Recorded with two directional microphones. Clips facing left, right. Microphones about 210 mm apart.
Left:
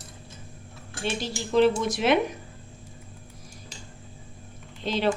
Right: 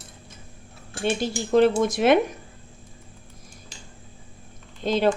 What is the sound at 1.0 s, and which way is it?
Speech, 50° right (ahead or behind).